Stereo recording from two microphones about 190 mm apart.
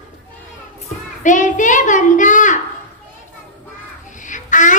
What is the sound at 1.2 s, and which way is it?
Child singing, 40° left (ahead or behind).